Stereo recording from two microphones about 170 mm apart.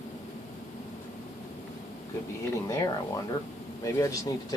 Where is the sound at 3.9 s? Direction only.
20° left (ahead or behind).